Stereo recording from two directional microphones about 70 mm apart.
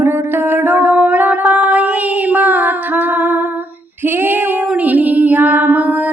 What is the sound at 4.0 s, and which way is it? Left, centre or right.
Female singing, right.